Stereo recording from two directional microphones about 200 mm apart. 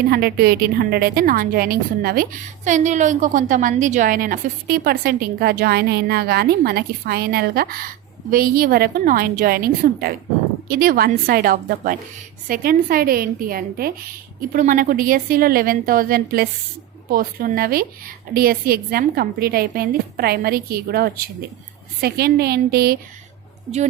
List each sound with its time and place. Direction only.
0.1 s a woman's voice: 50° right (ahead or behind)